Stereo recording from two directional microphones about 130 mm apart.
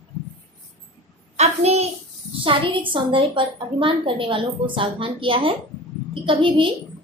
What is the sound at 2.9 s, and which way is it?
A woman's voice, 40° right (ahead or behind).